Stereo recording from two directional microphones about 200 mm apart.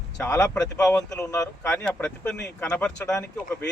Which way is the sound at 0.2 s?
15° left (ahead or behind).